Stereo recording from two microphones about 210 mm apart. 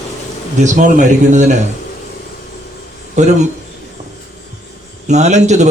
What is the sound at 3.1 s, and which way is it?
Speech, 35° right (ahead or behind).